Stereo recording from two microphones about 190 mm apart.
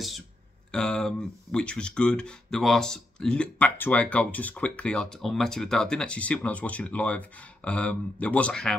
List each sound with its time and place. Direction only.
0.7 s speech: 5° left (ahead or behind)